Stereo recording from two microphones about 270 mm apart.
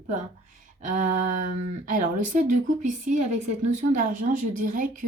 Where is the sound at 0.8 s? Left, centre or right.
Right.